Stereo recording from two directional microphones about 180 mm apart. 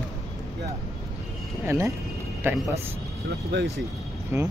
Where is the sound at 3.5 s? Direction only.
75° right (ahead or behind).